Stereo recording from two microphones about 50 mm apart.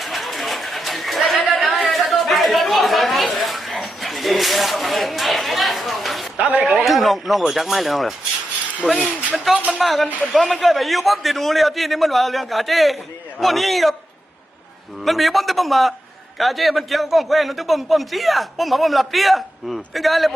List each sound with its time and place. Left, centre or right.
0.0 s a sound: centre
6.3 s speech: right
6.8 s a man's voice: centre
8.8 s speech: right
9.3 s a man's voice: centre
15.0 s a man's voice: centre